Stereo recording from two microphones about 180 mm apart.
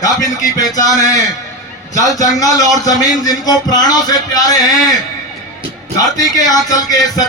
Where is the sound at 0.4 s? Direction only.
20° left (ahead or behind).